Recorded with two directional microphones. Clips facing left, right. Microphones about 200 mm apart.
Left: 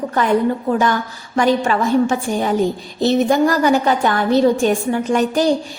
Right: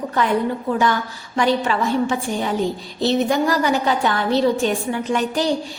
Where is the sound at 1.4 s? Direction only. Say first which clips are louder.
Left 3 dB; 45° left (ahead or behind).